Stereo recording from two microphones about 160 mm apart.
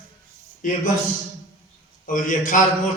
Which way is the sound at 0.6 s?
55° left (ahead or behind).